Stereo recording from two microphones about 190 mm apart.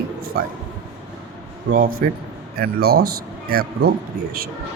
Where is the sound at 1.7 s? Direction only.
50° right (ahead or behind).